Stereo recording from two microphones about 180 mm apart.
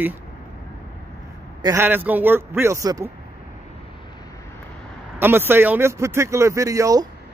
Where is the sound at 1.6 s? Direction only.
15° right (ahead or behind).